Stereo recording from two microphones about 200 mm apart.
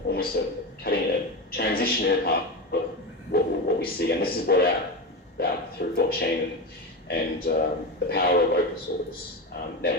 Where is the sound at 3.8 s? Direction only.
50° left (ahead or behind).